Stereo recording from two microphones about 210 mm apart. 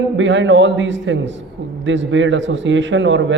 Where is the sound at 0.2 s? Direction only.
60° right (ahead or behind).